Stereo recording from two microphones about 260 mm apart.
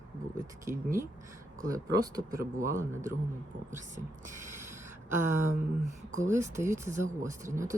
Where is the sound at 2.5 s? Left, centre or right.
Right.